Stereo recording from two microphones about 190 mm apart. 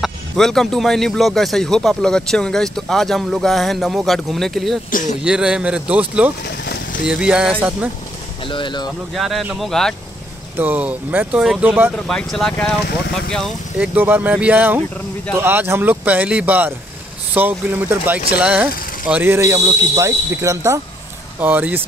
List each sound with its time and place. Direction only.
0.0 s speech: centre (ahead or behind)
6.4 s vehicle: 60° left (ahead or behind)
7.1 s speech: 5° right (ahead or behind)
8.5 s speech: 25° left (ahead or behind)
9.1 s speech: centre (ahead or behind)
10.6 s speech: 10° right (ahead or behind)
12.1 s speech: 5° left (ahead or behind)
13.9 s speech: 10° right (ahead or behind)